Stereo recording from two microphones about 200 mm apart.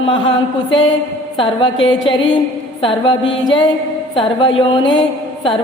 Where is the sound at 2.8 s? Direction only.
25° left (ahead or behind).